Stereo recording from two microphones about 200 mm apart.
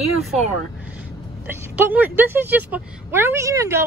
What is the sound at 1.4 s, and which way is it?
Speech, 10° right (ahead or behind).